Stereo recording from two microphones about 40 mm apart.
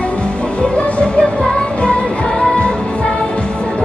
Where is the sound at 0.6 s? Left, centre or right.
Left.